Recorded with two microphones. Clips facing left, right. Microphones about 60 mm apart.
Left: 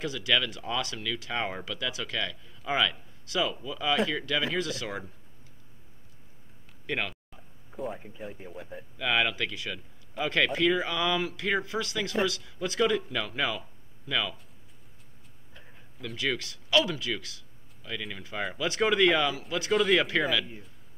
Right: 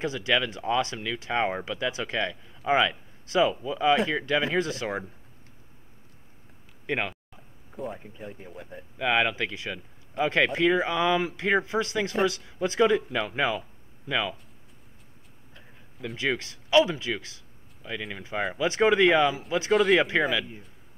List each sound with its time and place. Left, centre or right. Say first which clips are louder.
0.0 s speech: right 2 dB; right
6.9 s speech: right 3 dB; right
7.3 s speech: even; centre
8.9 s speech: right 3 dB; right
16.2 s speech: right 2 dB; right
19.7 s speech: right 3 dB; centre